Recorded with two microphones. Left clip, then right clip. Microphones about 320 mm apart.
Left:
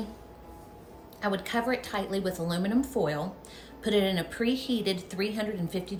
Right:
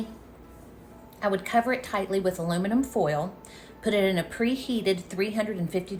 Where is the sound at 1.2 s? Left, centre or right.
Centre.